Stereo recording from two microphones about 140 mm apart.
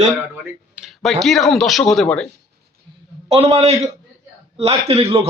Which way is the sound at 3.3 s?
45° right (ahead or behind).